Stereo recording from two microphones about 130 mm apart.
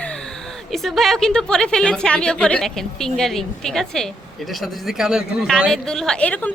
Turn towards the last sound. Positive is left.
turn(degrees=10)  # may be behind; listen again after turning